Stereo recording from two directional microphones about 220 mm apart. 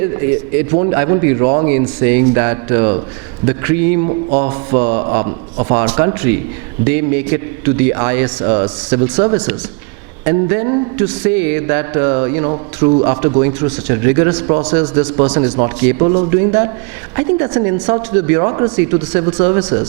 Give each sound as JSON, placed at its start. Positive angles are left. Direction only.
{"t": 0.0, "sound": "a man's voice", "side_deg": -15}
{"t": 5.2, "sound": "speech", "side_deg": -25}
{"t": 5.7, "sound": "a man's voice", "side_deg": -10}
{"t": 12.5, "sound": "speech", "side_deg": -25}
{"t": 13.4, "sound": "a man's voice", "side_deg": -15}
{"t": 15.4, "sound": "a man's voice", "side_deg": -25}